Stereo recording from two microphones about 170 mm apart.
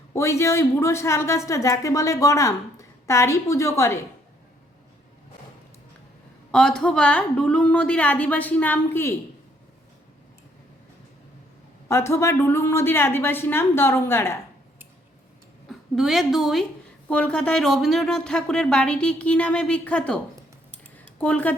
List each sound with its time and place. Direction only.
0.1 s speech: 15° left (ahead or behind)
6.5 s speech: 5° left (ahead or behind)
11.9 s speech: 15° left (ahead or behind)
15.7 s a woman's voice: centre (ahead or behind)
21.2 s speech: 10° left (ahead or behind)